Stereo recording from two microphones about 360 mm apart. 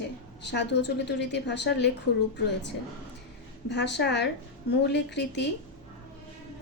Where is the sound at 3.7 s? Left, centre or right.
Left.